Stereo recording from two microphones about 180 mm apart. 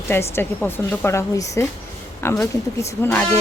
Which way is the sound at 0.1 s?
15° left (ahead or behind).